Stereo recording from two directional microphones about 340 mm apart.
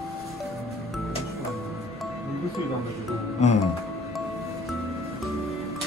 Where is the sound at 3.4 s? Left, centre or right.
Centre.